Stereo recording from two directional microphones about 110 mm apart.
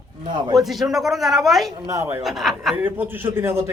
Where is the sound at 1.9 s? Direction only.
25° right (ahead or behind).